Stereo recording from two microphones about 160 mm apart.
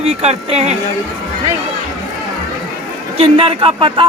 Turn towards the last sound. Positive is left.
turn(degrees=-35)  # may be behind; listen again after turning